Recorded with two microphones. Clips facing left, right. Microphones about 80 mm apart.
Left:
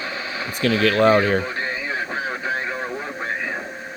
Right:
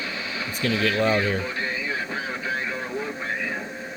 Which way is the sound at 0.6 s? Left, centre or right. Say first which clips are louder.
Left 6 dB; left.